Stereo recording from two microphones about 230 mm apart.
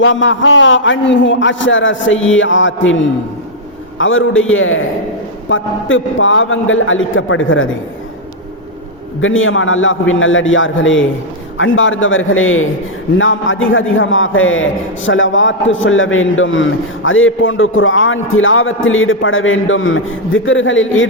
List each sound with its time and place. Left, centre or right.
0.0 s a man's voice: left
9.2 s a man's voice: left